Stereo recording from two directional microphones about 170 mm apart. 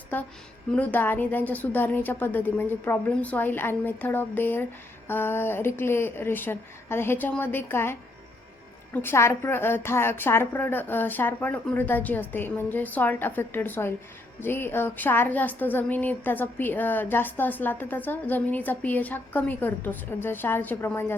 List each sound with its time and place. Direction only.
0.7 s speech: 10° left (ahead or behind)